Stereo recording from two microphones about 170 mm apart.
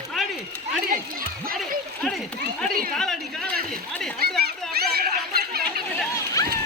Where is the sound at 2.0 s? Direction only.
Centre (ahead or behind).